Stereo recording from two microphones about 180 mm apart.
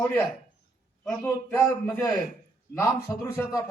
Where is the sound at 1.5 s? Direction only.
10° left (ahead or behind).